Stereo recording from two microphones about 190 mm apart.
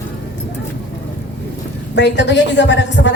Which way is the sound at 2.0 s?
65° left (ahead or behind).